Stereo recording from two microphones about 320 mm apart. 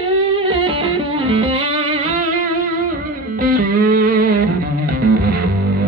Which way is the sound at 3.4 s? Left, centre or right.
Right.